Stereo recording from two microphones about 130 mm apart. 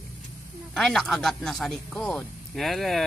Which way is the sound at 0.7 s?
Centre (ahead or behind).